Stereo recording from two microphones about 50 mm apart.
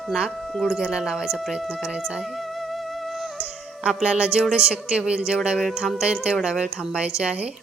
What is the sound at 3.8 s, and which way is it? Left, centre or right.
Speech, centre.